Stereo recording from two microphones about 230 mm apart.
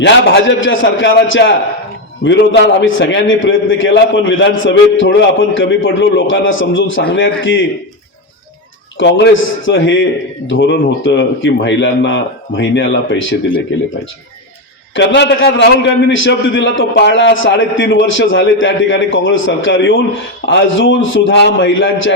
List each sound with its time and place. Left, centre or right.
0.0 s a man's voice: left
9.0 s a man's voice: left
14.9 s a man's voice: left